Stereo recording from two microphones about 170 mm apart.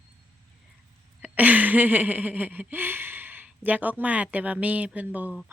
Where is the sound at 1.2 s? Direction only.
10° right (ahead or behind).